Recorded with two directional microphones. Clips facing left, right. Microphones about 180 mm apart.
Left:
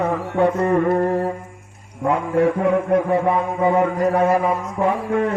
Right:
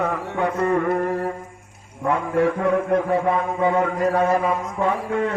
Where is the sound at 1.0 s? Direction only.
40° left (ahead or behind).